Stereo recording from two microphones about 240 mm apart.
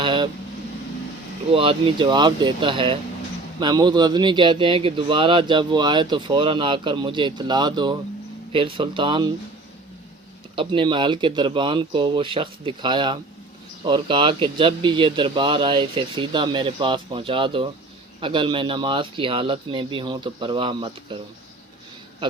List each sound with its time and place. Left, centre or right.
0.0 s vehicle: centre
1.5 s speech: right
10.5 s speech: right